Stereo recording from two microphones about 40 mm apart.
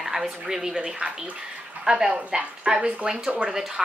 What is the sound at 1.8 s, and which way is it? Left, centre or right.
Speech, centre.